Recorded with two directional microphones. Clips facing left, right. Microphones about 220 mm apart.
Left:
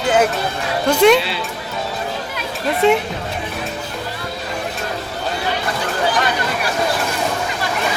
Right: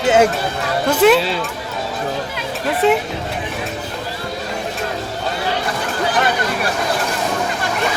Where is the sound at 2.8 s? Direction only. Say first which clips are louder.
Left 1 dB; centre (ahead or behind).